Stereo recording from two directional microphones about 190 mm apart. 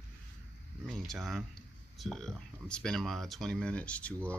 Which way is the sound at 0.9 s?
Centre (ahead or behind).